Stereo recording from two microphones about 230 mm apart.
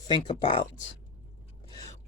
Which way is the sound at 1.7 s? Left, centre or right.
Centre.